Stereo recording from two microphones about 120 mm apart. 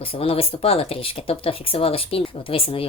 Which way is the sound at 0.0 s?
50° left (ahead or behind).